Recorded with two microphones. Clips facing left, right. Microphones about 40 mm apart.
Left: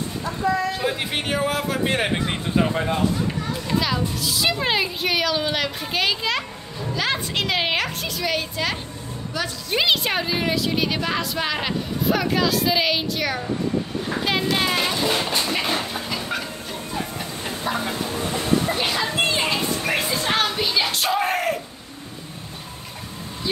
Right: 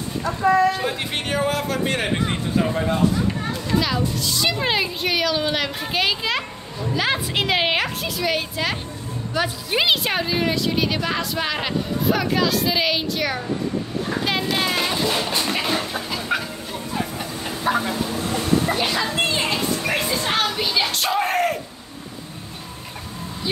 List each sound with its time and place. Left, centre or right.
0.7 s a woman's voice: centre
2.5 s speech: left
3.3 s a woman's voice: centre
9.4 s a woman's voice: centre
9.7 s a woman's voice: centre
17.7 s speech: right
18.8 s music: centre